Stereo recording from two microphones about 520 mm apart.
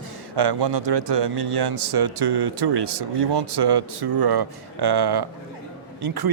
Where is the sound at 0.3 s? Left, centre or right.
Right.